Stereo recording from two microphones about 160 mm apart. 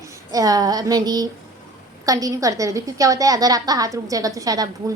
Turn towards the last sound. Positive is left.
turn(degrees=-20)  # may be behind; listen again after turning